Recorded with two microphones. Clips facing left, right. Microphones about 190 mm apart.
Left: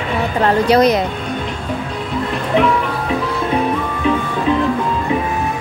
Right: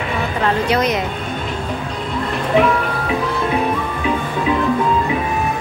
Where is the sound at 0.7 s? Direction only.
35° left (ahead or behind).